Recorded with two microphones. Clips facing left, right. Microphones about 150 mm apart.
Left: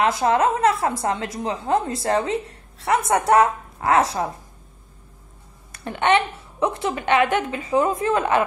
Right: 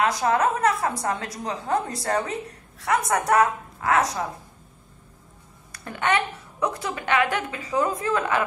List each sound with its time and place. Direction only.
0.0 s a woman's voice: 30° left (ahead or behind)
5.7 s a woman's voice: 25° left (ahead or behind)